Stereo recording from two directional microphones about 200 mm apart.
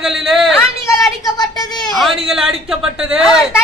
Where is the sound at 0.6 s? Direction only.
15° left (ahead or behind).